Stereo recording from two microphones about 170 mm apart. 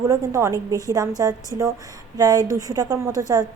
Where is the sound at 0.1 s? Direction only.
15° right (ahead or behind).